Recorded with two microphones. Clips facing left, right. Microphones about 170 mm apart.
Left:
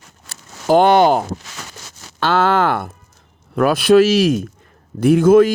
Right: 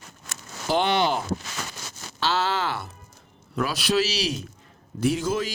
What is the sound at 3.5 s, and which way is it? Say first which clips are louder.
A man's voice: left 12 dB; 55° left (ahead or behind).